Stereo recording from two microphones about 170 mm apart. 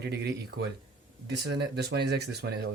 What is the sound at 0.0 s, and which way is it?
Speech, 75° right (ahead or behind).